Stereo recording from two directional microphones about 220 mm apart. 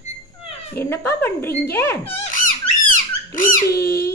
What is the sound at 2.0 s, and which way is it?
Squeak, 35° left (ahead or behind).